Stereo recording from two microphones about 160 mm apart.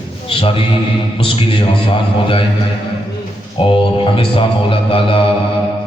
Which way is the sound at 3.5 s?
35° left (ahead or behind).